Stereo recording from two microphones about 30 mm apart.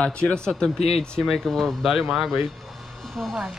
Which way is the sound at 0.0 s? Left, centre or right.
Left.